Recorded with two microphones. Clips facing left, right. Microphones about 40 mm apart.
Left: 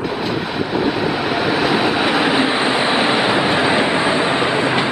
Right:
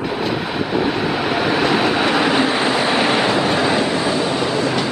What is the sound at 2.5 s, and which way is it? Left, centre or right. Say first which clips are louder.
Train: left 1 dB; centre.